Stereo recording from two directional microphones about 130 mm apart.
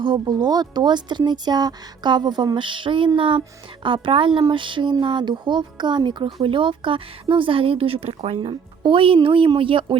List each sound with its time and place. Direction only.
0.0 s speech: 35° right (ahead or behind)